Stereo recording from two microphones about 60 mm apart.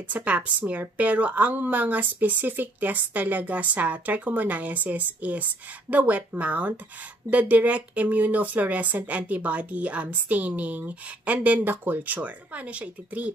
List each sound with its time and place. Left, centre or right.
0.1 s a woman's voice: right
11.6 s a woman's voice: right